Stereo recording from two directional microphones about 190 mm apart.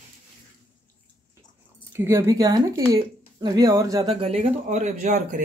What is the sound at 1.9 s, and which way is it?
Speech, 15° right (ahead or behind).